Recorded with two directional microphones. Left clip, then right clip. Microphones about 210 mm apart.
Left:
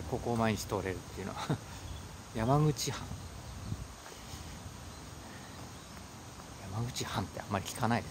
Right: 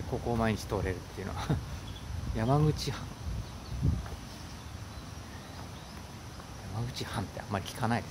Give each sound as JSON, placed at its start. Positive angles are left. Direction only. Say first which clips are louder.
{"t": 0.1, "sound": "speech", "louder": "right 1 dB", "side_deg": 15}
{"t": 7.0, "sound": "speech", "louder": "left 1 dB", "side_deg": 20}